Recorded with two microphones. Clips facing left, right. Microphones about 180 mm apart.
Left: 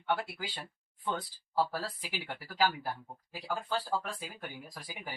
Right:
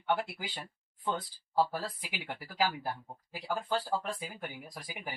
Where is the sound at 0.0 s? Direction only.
15° right (ahead or behind).